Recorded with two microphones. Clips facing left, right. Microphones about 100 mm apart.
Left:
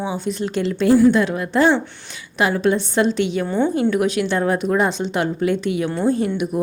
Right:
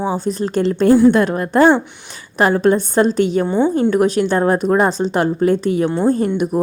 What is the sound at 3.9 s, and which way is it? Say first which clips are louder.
A woman's voice: right 4 dB; 40° right (ahead or behind).